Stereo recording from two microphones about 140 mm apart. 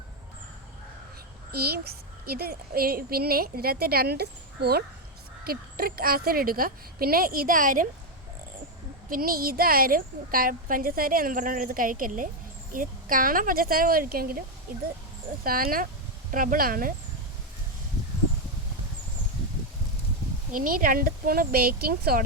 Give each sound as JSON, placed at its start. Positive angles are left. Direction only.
{"t": 1.5, "sound": "a woman's voice", "side_deg": -90}
{"t": 5.5, "sound": "a woman's voice", "side_deg": -90}
{"t": 9.0, "sound": "a woman's voice", "side_deg": -90}
{"t": 16.3, "sound": "a woman's voice", "side_deg": -80}
{"t": 20.5, "sound": "a woman's voice", "side_deg": -80}